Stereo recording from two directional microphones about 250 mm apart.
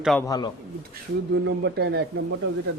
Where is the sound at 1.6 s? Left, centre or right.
Right.